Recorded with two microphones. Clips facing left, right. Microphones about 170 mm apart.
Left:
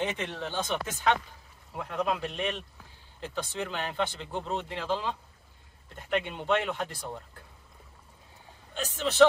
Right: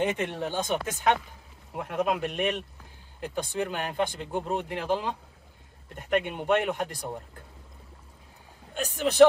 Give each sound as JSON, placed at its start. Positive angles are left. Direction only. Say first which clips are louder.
{"t": 0.0, "sound": "speech", "louder": "right 5 dB", "side_deg": -10}
{"t": 6.2, "sound": "speech", "louder": "right 3 dB", "side_deg": -15}
{"t": 8.7, "sound": "speech", "louder": "right 4 dB", "side_deg": -15}